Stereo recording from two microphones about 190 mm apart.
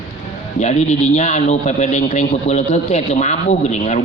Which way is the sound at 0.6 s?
35° left (ahead or behind).